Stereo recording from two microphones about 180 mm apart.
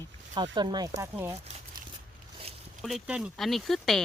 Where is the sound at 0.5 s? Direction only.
25° right (ahead or behind).